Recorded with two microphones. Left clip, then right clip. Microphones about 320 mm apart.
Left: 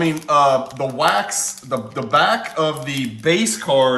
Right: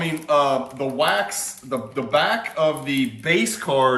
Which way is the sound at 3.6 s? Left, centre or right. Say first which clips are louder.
Left 4 dB; centre.